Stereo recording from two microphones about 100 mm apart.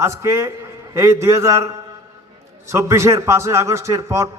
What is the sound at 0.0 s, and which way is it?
A man's voice, 30° right (ahead or behind).